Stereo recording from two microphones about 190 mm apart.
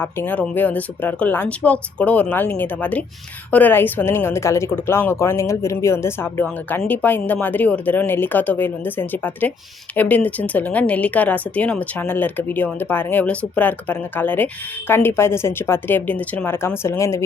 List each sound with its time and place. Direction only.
0.0 s speech: 10° left (ahead or behind)